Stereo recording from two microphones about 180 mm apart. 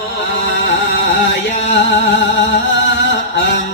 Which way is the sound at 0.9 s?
90° left.